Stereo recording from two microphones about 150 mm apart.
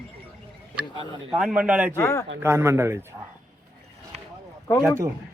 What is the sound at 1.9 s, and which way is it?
Speech, 20° left (ahead or behind).